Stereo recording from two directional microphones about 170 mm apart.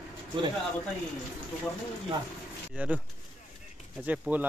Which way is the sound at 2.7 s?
10° right (ahead or behind).